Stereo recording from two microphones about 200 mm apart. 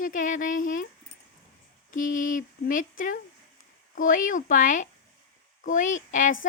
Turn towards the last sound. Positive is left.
turn(degrees=40)  # may be behind; listen again after turning